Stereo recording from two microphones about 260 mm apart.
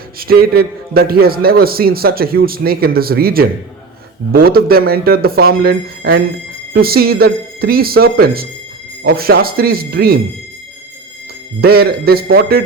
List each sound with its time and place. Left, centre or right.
0.2 s a man's voice: right
11.6 s a man's voice: right